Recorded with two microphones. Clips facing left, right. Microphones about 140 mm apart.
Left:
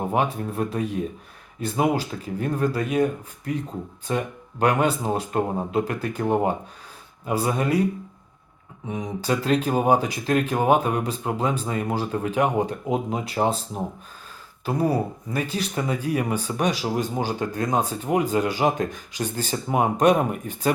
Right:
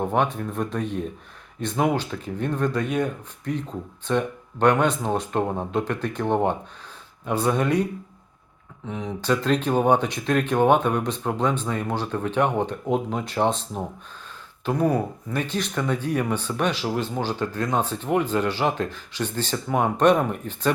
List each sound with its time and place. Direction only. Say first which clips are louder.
0.0 s speech: right 1 dB; 5° left (ahead or behind)
8.9 s speech: right 1 dB; 15° left (ahead or behind)